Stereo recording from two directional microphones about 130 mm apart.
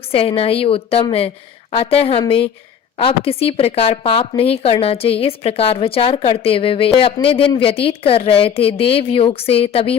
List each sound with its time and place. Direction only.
0.1 s a woman's voice: 45° left (ahead or behind)